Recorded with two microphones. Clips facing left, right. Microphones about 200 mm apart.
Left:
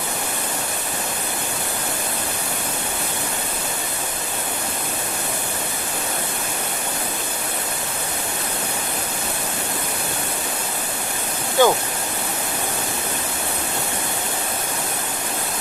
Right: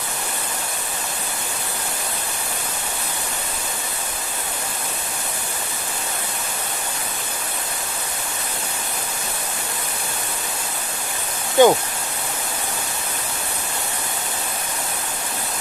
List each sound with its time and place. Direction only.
11.6 s speech: 20° right (ahead or behind)